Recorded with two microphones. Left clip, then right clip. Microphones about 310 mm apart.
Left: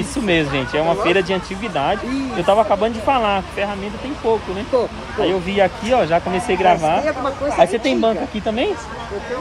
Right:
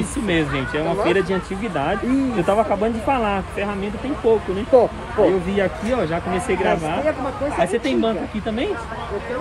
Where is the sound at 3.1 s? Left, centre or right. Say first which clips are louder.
Left 3 dB; centre.